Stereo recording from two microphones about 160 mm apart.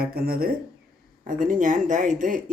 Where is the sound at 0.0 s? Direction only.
70° right (ahead or behind).